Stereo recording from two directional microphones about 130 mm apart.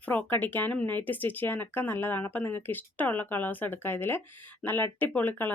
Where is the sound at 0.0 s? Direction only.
15° left (ahead or behind).